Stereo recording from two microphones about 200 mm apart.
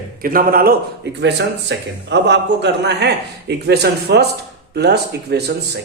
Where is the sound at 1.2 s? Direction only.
60° right (ahead or behind).